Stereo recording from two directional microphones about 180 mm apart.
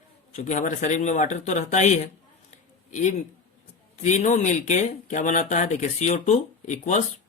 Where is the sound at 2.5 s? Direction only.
40° left (ahead or behind).